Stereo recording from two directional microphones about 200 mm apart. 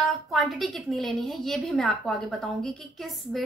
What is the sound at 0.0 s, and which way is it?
A woman's voice, centre (ahead or behind).